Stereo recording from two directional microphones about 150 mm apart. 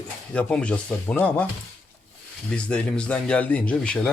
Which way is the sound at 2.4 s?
5° left (ahead or behind).